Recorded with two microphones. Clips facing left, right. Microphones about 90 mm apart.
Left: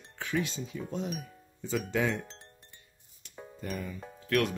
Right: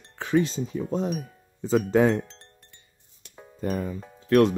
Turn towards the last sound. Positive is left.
turn(degrees=-30)  # may be behind; listen again after turning